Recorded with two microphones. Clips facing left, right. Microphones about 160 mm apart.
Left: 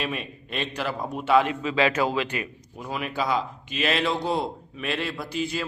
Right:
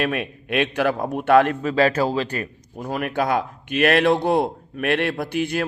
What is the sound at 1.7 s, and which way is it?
Speech, 40° right (ahead or behind).